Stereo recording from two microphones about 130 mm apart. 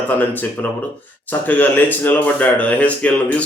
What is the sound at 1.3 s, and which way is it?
Speech, 15° left (ahead or behind).